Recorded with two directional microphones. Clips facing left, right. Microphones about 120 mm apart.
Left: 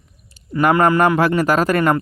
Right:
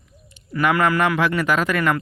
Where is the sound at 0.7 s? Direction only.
30° left (ahead or behind).